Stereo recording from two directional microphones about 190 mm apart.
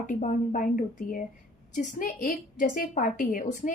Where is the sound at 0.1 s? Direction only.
40° left (ahead or behind).